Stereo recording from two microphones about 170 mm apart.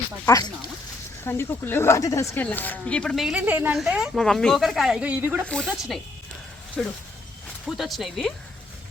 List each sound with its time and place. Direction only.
0.3 s a woman's voice: 20° left (ahead or behind); by 5.5 s 10° right (ahead or behind)
5.5 s speech: 5° left (ahead or behind)